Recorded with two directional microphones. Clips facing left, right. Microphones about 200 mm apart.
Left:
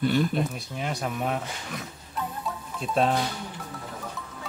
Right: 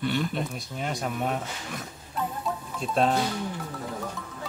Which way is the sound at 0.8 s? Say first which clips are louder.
Even; centre (ahead or behind).